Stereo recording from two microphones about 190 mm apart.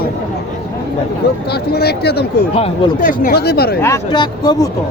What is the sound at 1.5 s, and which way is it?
Speech, 55° left (ahead or behind).